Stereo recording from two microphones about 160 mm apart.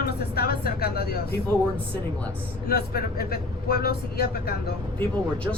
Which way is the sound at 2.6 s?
75° left (ahead or behind).